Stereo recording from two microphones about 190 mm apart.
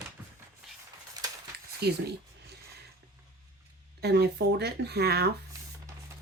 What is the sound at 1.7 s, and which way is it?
Speech, 55° right (ahead or behind).